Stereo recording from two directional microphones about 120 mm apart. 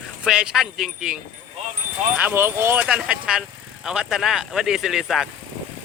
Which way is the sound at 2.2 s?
15° right (ahead or behind).